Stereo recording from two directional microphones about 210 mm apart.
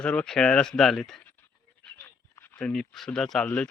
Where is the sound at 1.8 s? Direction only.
10° left (ahead or behind).